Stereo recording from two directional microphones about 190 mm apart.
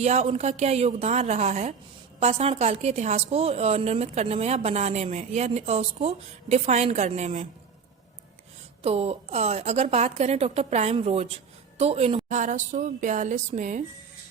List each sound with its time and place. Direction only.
0.0 s a woman's voice: 35° right (ahead or behind)
8.8 s a woman's voice: 35° right (ahead or behind)